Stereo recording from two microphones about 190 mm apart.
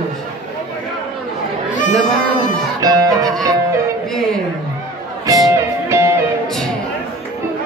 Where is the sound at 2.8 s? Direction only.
20° right (ahead or behind).